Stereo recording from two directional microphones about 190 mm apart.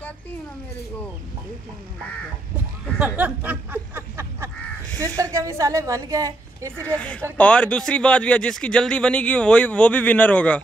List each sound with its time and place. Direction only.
2.5 s a sound: 5° right (ahead or behind)
5.0 s a woman's voice: 15° right (ahead or behind)
7.0 s speech: 5° left (ahead or behind)